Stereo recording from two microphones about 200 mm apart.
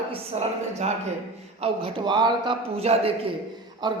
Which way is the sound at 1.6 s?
25° right (ahead or behind).